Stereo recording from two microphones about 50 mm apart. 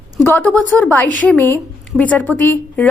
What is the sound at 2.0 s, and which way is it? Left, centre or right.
Speech, left.